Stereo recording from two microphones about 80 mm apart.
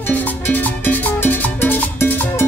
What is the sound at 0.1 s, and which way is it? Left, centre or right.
Music, left.